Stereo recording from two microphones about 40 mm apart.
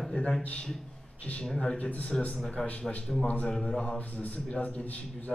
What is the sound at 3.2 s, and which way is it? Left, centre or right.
Speech, left.